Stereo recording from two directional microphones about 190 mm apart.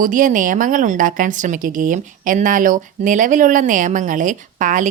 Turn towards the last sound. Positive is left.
turn(degrees=-45)  # may be behind; listen again after turning